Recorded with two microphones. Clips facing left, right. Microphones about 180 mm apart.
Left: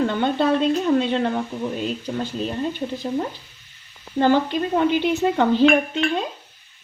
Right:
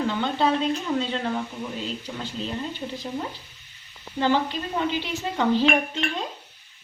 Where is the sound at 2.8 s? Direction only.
40° left (ahead or behind).